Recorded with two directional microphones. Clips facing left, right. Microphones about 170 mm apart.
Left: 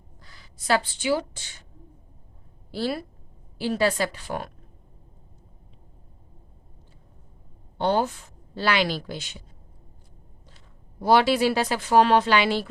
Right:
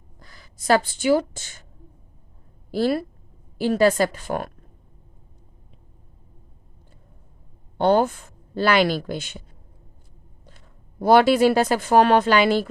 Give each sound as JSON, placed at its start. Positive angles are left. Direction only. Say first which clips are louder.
{"t": 0.2, "sound": "speech", "louder": "right 4 dB", "side_deg": -45}
{"t": 2.7, "sound": "speech", "louder": "right 6 dB", "side_deg": -50}
{"t": 7.8, "sound": "speech", "louder": "right 5 dB", "side_deg": -50}
{"t": 11.0, "sound": "speech", "louder": "right 4 dB", "side_deg": -50}